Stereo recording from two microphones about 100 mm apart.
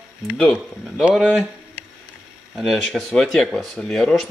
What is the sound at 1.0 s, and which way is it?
Speech, 5° right (ahead or behind).